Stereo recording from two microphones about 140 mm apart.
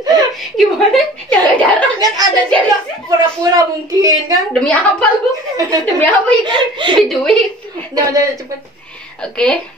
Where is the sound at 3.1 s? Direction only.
25° right (ahead or behind).